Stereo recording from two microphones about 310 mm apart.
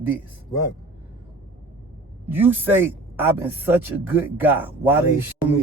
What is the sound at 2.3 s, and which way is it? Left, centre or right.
A man's voice, centre.